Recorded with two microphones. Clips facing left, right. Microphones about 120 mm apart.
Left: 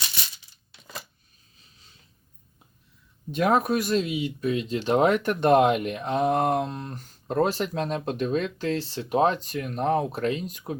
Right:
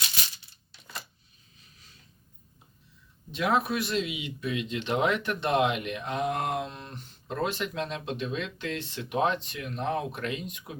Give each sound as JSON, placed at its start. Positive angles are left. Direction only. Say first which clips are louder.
{"t": 3.3, "sound": "speech", "louder": "left 5 dB", "side_deg": 45}